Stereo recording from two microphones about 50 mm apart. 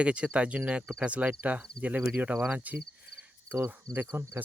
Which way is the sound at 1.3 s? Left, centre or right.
Right.